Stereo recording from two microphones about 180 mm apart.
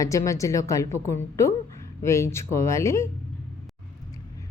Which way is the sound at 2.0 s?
15° left (ahead or behind).